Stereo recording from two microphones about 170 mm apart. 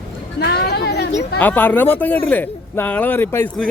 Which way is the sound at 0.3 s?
70° left (ahead or behind).